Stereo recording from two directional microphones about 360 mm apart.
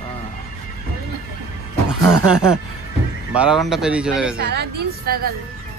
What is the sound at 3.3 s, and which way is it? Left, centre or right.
Speech, centre.